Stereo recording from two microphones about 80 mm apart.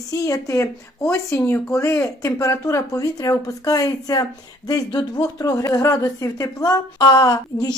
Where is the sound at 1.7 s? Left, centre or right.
Left.